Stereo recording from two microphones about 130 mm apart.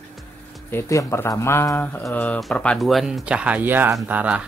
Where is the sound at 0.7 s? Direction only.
20° left (ahead or behind).